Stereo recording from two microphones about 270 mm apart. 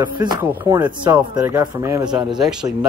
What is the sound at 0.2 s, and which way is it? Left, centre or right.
Speech, centre.